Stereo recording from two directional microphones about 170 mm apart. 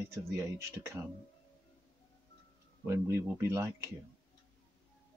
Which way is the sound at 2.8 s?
15° right (ahead or behind).